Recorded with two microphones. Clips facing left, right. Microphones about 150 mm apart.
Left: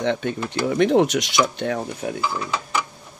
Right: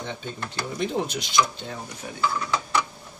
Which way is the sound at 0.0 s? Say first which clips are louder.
Left 11 dB; 70° left (ahead or behind).